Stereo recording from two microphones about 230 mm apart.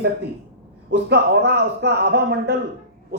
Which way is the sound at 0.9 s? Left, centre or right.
Right.